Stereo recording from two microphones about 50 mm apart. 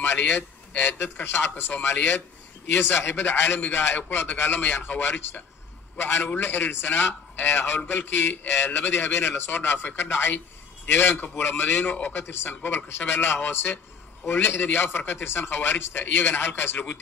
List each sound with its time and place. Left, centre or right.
0.0 s a man's voice: left